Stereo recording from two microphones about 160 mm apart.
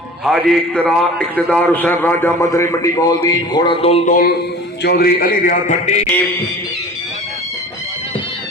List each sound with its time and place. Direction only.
0.3 s a man's voice: centre (ahead or behind); by 4.1 s 40° left (ahead or behind)
4.1 s a man's voice: 65° left (ahead or behind); by 6.1 s 45° left (ahead or behind)